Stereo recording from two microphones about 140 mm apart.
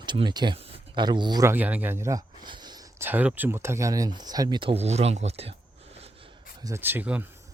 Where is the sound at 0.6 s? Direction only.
45° right (ahead or behind).